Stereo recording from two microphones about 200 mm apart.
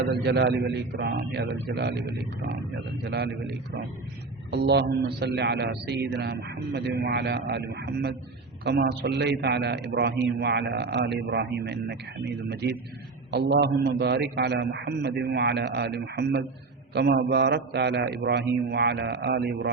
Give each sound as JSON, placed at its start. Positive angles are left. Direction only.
{"t": 0.0, "sound": "a man's voice", "side_deg": -55}